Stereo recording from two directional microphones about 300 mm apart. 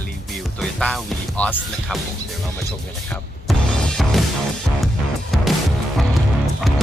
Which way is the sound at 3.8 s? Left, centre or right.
Centre.